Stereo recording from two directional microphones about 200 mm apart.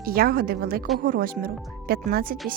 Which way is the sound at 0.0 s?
50° right (ahead or behind).